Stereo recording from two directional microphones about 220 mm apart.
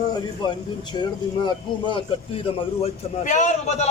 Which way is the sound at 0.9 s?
20° left (ahead or behind).